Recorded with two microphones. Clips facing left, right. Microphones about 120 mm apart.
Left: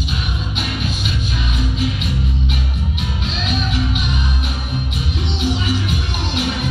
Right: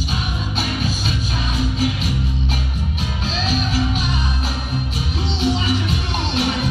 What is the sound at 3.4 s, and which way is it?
Music, 35° right (ahead or behind).